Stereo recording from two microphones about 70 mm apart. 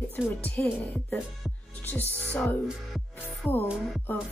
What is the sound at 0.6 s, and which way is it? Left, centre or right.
Speech, left.